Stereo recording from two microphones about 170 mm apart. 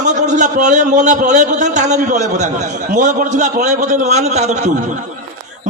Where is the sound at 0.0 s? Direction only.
45° right (ahead or behind).